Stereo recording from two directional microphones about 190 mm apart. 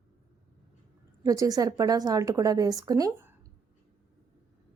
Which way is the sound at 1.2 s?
15° right (ahead or behind).